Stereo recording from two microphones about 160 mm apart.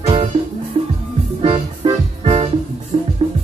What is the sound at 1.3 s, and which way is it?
Music, 35° right (ahead or behind).